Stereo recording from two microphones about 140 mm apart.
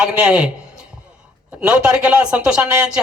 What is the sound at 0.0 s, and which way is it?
Speech, 15° right (ahead or behind).